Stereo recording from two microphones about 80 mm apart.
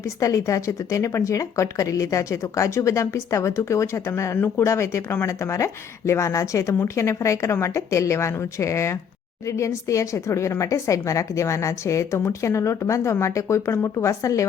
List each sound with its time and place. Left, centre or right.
0.2 s a woman's voice: left